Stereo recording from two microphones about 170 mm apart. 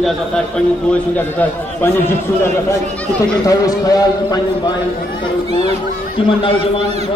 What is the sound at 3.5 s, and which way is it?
Speech, 20° left (ahead or behind).